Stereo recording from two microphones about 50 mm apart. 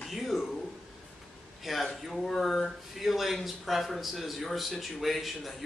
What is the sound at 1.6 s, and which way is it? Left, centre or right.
Speech, centre.